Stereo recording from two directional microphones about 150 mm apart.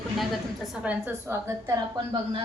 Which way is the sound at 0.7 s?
10° right (ahead or behind).